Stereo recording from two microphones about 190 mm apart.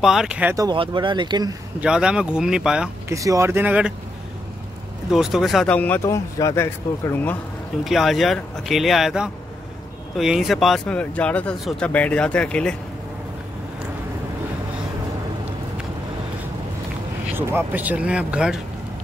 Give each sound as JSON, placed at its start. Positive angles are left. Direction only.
{"t": 0.0, "sound": "speech", "side_deg": 0}
{"t": 0.7, "sound": "speech", "side_deg": -25}
{"t": 1.8, "sound": "speech", "side_deg": -5}
{"t": 3.1, "sound": "speech", "side_deg": -15}
{"t": 5.1, "sound": "speech", "side_deg": 0}
{"t": 7.8, "sound": "speech", "side_deg": 0}
{"t": 17.4, "sound": "speech", "side_deg": -10}